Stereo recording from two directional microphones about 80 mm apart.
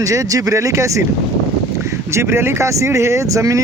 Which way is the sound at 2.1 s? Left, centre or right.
Right.